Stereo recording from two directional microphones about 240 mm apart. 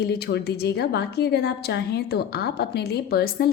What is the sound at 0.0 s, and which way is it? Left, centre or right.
A woman's voice, left.